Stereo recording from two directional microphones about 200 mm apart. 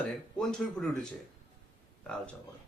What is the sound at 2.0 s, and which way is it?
Speech, 5° left (ahead or behind).